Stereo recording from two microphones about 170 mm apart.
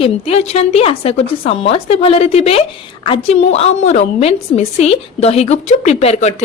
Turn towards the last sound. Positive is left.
turn(degrees=40)  # may be behind; listen again after turning